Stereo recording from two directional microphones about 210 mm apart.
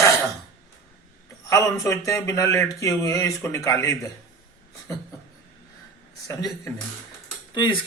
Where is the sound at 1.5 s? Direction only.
15° left (ahead or behind).